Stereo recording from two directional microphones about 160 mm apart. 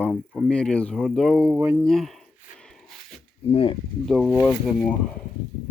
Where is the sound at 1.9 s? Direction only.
Centre (ahead or behind).